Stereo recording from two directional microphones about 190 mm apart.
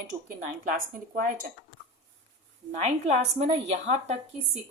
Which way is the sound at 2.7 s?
35° right (ahead or behind).